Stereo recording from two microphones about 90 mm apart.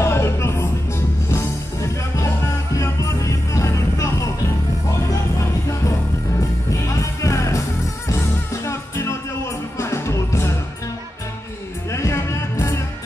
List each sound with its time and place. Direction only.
0.0 s music: 30° left (ahead or behind)
6.9 s music: 35° left (ahead or behind)
8.6 s music: 30° left (ahead or behind)
11.9 s music: 30° left (ahead or behind)